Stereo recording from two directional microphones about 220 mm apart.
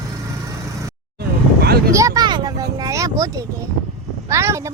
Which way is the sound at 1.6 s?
45° right (ahead or behind).